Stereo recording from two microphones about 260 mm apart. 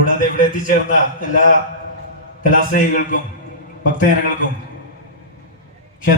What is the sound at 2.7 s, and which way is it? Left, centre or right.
Speech, left.